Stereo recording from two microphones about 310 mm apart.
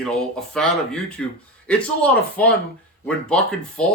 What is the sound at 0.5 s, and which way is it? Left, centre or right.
Speech, centre.